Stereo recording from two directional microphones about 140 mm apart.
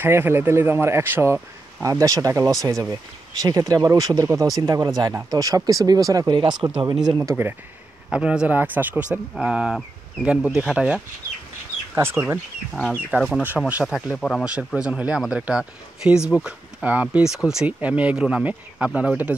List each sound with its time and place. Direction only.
0.0 s speech: 15° right (ahead or behind)
8.1 s speech: 10° right (ahead or behind)
11.9 s speech: 15° right (ahead or behind)
14.1 s speech: 10° left (ahead or behind)
14.4 s speech: 5° right (ahead or behind)